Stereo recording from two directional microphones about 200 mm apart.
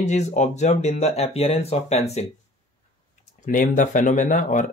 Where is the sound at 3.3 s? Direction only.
40° left (ahead or behind).